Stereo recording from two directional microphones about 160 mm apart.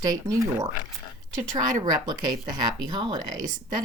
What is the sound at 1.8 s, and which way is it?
Speech, 25° right (ahead or behind).